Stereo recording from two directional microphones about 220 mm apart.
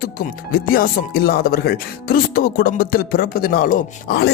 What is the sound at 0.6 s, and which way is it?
Speech, 40° left (ahead or behind).